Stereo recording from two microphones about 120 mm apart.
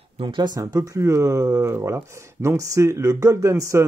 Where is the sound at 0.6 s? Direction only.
30° right (ahead or behind).